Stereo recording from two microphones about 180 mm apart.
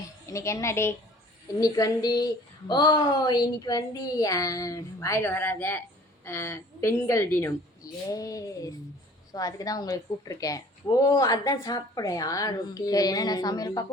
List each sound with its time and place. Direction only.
0.3 s a woman's voice: 15° left (ahead or behind)